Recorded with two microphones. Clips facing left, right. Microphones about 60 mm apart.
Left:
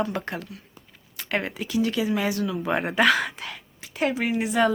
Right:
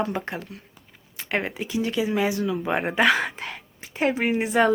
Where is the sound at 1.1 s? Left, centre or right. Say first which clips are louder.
Right 1 dB; right.